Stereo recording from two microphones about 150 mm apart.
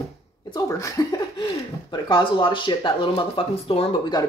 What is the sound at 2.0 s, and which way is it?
Speech, 30° left (ahead or behind).